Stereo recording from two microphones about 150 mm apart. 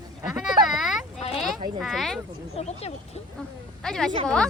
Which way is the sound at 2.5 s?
45° left (ahead or behind).